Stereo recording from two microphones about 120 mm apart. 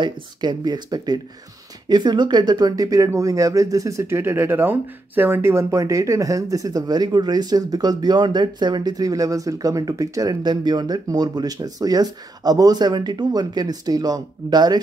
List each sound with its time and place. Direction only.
0.0 s speech: 35° right (ahead or behind)